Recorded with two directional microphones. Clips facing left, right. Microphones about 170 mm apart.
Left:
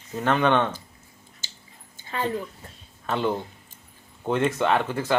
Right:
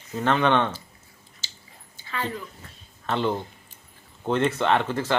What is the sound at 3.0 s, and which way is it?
Speech, 10° left (ahead or behind).